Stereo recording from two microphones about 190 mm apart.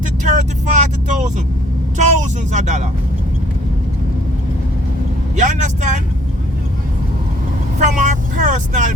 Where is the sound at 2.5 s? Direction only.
40° right (ahead or behind).